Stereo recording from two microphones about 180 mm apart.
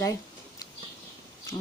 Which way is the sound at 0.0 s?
20° left (ahead or behind).